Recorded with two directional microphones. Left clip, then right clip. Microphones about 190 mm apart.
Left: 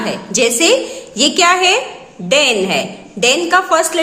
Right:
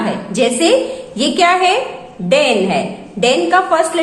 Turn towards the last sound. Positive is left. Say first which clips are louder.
# even
turn(degrees=25)  # may be behind; listen again after turning